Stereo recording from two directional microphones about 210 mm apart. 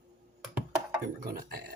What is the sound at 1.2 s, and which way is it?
Speech, 45° right (ahead or behind).